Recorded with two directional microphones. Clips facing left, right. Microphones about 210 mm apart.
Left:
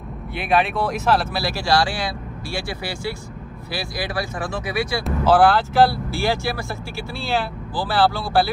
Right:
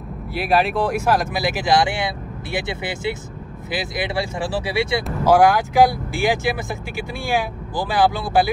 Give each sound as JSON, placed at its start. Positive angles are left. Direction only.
{"t": 0.3, "sound": "speech", "side_deg": 0}
{"t": 0.9, "sound": "speech", "side_deg": -10}
{"t": 5.2, "sound": "speech", "side_deg": -10}